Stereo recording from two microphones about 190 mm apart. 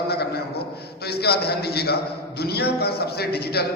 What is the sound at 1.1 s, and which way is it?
A man's voice, 55° left (ahead or behind).